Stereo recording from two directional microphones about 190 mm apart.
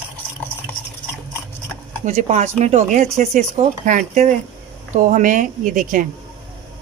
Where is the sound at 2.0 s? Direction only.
40° right (ahead or behind).